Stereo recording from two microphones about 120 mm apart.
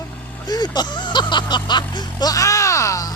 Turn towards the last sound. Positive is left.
turn(degrees=25)  # may be behind; listen again after turning